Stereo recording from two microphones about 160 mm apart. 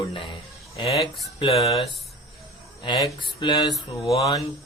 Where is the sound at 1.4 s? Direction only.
35° left (ahead or behind).